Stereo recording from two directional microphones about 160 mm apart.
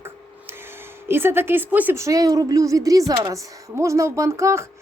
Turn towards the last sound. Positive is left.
turn(degrees=-15)  # may be behind; listen again after turning